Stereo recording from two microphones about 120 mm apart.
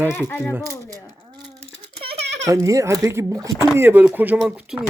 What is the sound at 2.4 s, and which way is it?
Speech, 25° right (ahead or behind).